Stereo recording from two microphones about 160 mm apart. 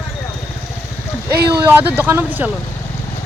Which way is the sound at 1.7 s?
10° right (ahead or behind).